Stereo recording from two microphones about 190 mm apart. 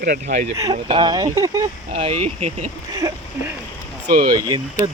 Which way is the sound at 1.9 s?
30° right (ahead or behind).